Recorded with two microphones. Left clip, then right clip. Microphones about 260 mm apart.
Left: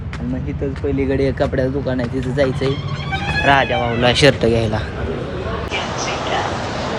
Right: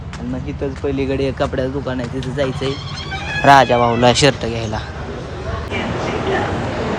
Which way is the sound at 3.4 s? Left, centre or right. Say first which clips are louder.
Right 5 dB; right.